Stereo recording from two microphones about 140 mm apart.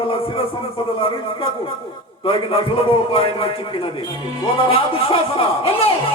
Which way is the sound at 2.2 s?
40° left (ahead or behind).